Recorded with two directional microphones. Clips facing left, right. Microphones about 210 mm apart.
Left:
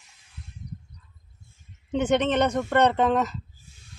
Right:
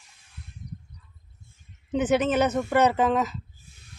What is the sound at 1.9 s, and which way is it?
A woman's voice, 5° right (ahead or behind).